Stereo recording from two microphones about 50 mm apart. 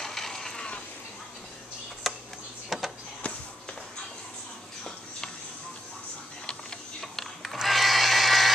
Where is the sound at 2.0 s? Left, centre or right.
Centre.